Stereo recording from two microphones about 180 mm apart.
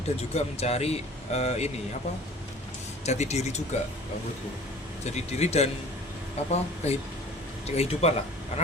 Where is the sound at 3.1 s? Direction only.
40° left (ahead or behind).